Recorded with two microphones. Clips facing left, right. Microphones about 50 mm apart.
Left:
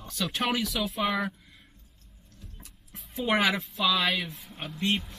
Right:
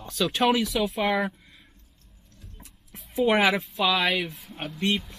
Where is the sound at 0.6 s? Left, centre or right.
Centre.